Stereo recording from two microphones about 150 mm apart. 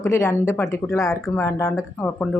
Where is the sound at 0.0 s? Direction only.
20° left (ahead or behind).